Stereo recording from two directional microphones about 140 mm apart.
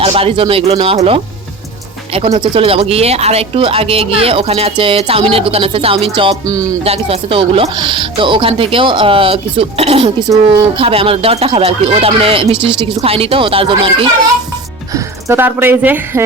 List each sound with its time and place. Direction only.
0.0 s speech: 45° right (ahead or behind)
6.5 s music: 25° right (ahead or behind)
6.8 s speech: 45° right (ahead or behind)
14.9 s speech: 15° right (ahead or behind)